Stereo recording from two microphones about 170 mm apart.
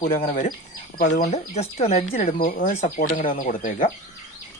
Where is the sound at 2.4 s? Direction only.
55° left (ahead or behind).